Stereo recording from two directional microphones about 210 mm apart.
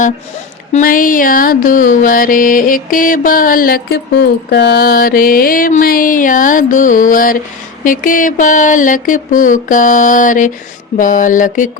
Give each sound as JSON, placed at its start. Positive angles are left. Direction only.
{"t": 0.7, "sound": "music", "side_deg": 40}